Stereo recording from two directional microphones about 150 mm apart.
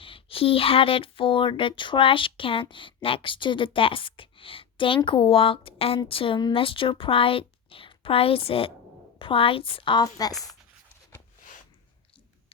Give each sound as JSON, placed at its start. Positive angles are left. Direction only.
{"t": 0.0, "sound": "speech", "side_deg": 35}